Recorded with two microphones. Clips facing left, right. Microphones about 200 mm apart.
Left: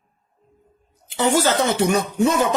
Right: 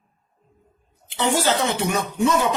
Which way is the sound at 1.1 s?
45° left (ahead or behind).